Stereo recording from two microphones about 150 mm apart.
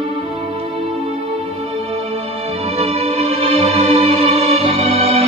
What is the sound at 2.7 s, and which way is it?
Music, 45° right (ahead or behind).